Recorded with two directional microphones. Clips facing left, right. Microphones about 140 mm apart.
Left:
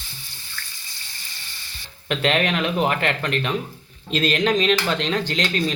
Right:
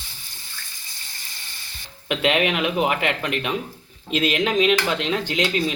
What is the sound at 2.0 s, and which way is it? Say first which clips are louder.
Speech: even; 10° right (ahead or behind).